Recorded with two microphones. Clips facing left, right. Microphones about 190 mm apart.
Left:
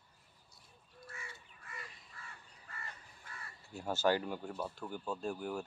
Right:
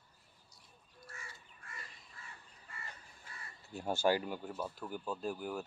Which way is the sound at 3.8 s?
15° right (ahead or behind).